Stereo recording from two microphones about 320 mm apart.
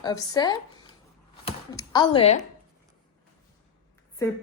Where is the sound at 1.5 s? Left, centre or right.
Centre.